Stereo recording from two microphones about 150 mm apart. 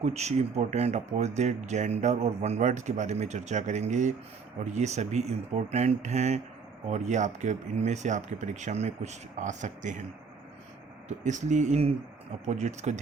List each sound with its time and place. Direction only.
0.0 s speech: 45° right (ahead or behind)
11.2 s speech: 55° right (ahead or behind)